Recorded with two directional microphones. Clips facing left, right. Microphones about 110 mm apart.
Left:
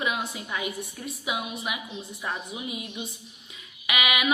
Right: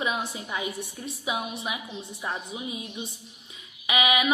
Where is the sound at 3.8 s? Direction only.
30° right (ahead or behind).